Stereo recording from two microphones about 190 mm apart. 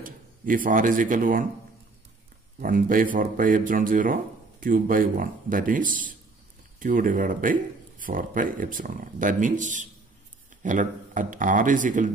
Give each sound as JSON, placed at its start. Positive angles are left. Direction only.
{"t": 0.0, "sound": "speech", "side_deg": -45}
{"t": 2.6, "sound": "speech", "side_deg": -45}